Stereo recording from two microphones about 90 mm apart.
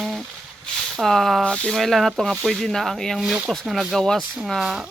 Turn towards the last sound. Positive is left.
turn(degrees=-5)  # may be behind; listen again after turning